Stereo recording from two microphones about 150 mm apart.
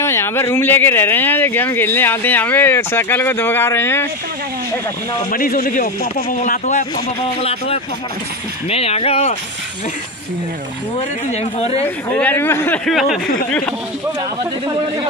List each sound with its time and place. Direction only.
0.0 s speech: 15° left (ahead or behind)
5.3 s speech: 70° left (ahead or behind)
7.2 s speech: 40° left (ahead or behind)
11.2 s speech: 45° left (ahead or behind)
12.1 s speech: 10° left (ahead or behind)
12.8 s speech: centre (ahead or behind)